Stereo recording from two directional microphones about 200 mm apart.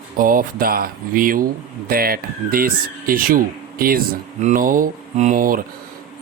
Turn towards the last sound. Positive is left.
turn(degrees=-45)  # may be behind; listen again after turning